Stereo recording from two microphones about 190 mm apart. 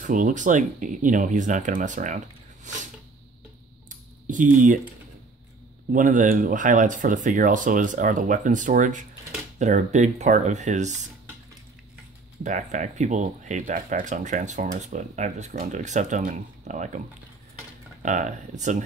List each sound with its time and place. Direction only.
0.0 s speech: 45° right (ahead or behind)
4.3 s speech: 45° right (ahead or behind)
5.9 s speech: 45° right (ahead or behind)
12.4 s speech: 40° right (ahead or behind)
18.0 s speech: 40° right (ahead or behind)